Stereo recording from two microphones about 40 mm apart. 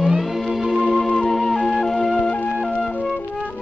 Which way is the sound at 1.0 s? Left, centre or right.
Centre.